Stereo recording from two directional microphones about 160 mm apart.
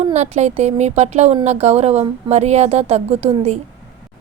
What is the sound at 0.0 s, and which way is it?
A woman's voice, 45° right (ahead or behind).